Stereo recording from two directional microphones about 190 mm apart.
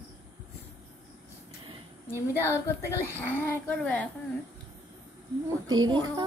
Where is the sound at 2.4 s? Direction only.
15° left (ahead or behind).